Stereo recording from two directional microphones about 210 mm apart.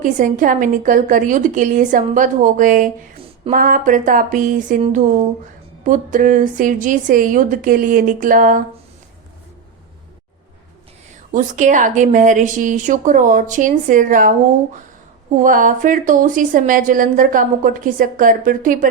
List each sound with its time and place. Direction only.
0.0 s a woman's voice: 40° right (ahead or behind)
11.3 s a woman's voice: 40° right (ahead or behind)